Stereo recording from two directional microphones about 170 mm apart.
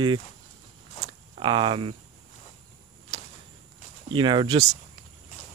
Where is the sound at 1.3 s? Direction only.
30° right (ahead or behind).